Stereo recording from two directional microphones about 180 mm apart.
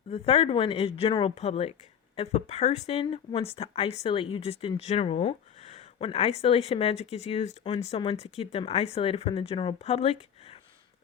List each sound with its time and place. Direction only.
0.1 s speech: 35° left (ahead or behind)